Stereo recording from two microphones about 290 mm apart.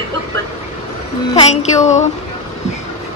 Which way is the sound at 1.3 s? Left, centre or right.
Left.